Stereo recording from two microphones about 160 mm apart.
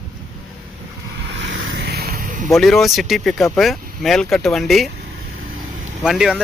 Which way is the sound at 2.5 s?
Centre (ahead or behind).